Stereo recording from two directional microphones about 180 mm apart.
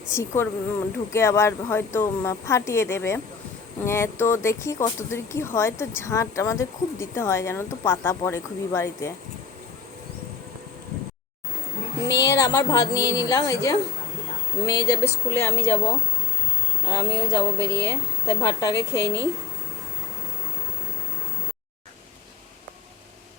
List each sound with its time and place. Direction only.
0.1 s speech: 15° left (ahead or behind)
12.0 s a woman's voice: 70° left (ahead or behind)
12.3 s music: 20° left (ahead or behind)
14.7 s speech: 20° left (ahead or behind)
16.8 s speech: 20° left (ahead or behind)